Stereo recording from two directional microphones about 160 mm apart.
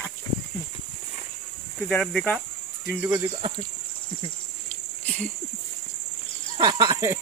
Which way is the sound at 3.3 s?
35° right (ahead or behind).